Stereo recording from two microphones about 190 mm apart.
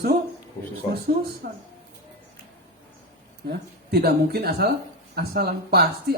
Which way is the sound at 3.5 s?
55° right (ahead or behind).